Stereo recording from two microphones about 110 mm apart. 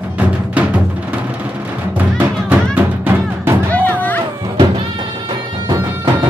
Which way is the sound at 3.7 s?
15° left (ahead or behind).